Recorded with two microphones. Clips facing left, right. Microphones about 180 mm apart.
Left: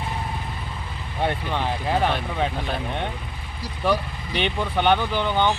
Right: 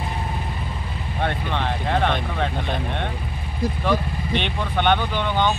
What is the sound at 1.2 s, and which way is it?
Speech, 10° left (ahead or behind).